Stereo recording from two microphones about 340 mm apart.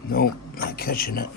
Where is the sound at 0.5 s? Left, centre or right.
Left.